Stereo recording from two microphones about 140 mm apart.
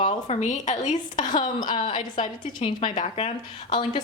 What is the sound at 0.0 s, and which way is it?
Speech, 55° left (ahead or behind).